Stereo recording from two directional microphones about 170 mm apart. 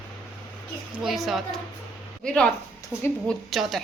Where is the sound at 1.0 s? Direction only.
Centre (ahead or behind).